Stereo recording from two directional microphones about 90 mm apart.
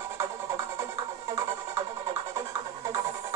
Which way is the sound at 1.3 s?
35° right (ahead or behind).